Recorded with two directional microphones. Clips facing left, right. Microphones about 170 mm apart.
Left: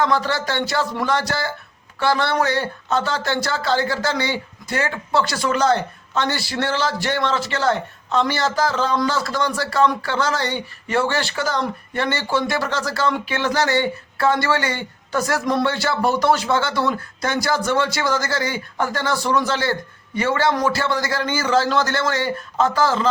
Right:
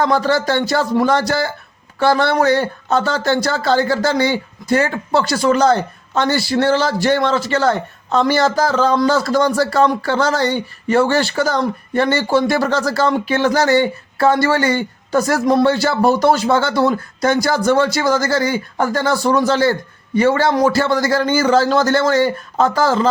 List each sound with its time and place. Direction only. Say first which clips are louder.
0.0 s speech: right 5 dB; 40° right (ahead or behind)